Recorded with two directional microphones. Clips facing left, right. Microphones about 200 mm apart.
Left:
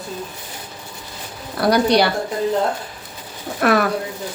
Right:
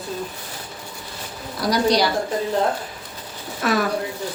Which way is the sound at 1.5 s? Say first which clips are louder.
Left 4 dB; 60° left (ahead or behind).